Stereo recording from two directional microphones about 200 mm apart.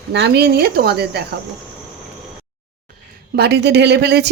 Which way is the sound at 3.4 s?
55° right (ahead or behind).